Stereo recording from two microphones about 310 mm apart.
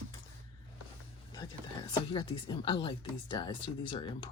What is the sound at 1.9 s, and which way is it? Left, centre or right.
Speech, centre.